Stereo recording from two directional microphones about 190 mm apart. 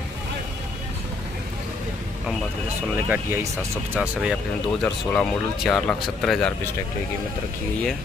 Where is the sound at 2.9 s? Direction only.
10° right (ahead or behind).